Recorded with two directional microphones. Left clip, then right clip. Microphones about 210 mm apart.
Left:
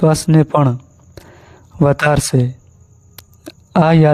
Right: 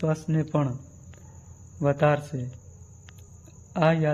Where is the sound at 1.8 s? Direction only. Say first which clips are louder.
Left 9 dB; 50° left (ahead or behind).